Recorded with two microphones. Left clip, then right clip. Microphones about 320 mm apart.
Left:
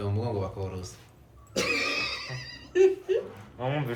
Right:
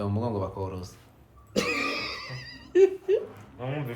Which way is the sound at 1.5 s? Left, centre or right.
Right.